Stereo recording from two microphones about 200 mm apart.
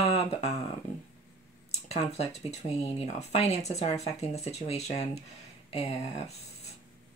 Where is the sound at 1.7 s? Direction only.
30° left (ahead or behind).